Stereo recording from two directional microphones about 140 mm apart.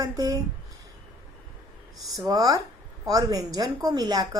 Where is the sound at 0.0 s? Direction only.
25° right (ahead or behind).